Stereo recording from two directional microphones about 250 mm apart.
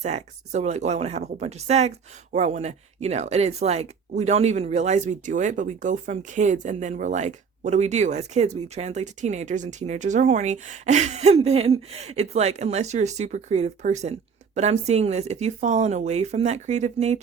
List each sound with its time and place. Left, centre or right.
0.0 s speech: right